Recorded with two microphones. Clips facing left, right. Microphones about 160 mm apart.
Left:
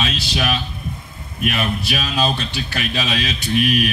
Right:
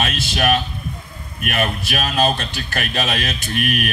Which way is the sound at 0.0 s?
50° right (ahead or behind).